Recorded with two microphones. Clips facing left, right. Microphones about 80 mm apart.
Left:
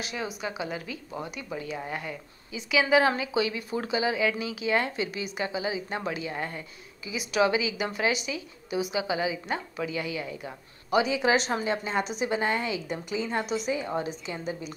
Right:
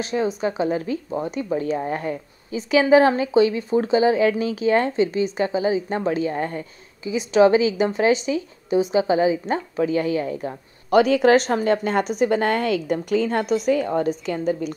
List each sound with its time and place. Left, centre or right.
0.0 s a woman's voice: right